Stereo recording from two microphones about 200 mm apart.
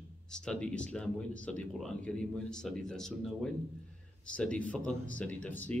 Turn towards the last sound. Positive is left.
turn(degrees=5)  # may be behind; listen again after turning